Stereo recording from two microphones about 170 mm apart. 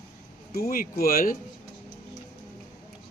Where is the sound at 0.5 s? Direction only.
60° left (ahead or behind).